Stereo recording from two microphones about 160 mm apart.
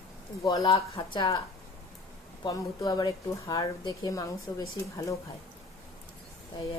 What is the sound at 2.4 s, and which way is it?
Speech, 25° left (ahead or behind).